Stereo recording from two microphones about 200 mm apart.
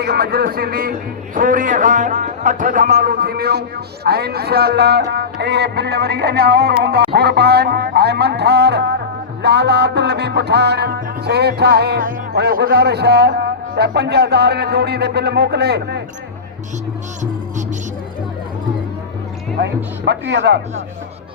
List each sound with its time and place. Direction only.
0.0 s music: 50° right (ahead or behind)
1.4 s speech: 40° right (ahead or behind)
4.0 s music: 50° right (ahead or behind)
19.5 s music: 60° right (ahead or behind)